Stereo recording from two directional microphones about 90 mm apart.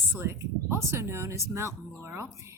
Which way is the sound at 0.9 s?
30° right (ahead or behind).